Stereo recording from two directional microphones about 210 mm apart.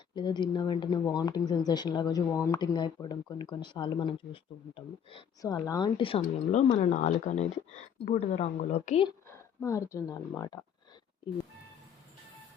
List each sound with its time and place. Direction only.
0.1 s speech: 20° left (ahead or behind)
9.6 s speech: 15° left (ahead or behind)